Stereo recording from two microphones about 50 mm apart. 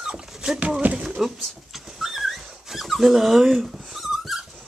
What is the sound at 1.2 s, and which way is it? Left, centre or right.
Dog, centre.